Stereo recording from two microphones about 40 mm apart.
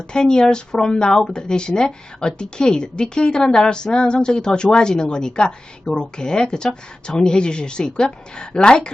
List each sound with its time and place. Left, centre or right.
0.1 s speech: centre